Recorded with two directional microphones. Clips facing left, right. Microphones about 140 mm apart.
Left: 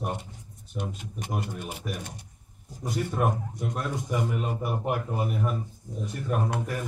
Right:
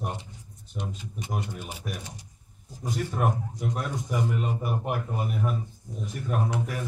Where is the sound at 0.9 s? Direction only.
55° left (ahead or behind).